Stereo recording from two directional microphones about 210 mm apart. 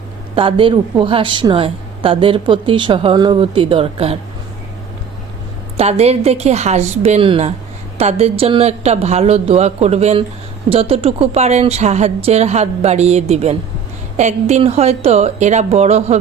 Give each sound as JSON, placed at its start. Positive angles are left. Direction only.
{"t": 0.3, "sound": "a woman's voice", "side_deg": -25}
{"t": 5.7, "sound": "a woman's voice", "side_deg": -30}